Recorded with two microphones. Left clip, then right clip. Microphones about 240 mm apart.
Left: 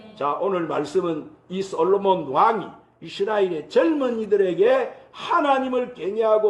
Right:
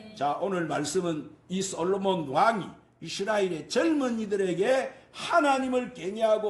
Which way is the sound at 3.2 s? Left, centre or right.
Right.